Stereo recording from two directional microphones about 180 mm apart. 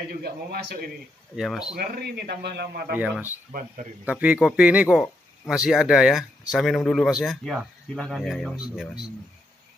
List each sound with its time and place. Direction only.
0.1 s a man's voice: 60° right (ahead or behind)
1.3 s speech: centre (ahead or behind)
1.8 s a man's voice: 60° right (ahead or behind)
3.0 s a man's voice: 10° right (ahead or behind)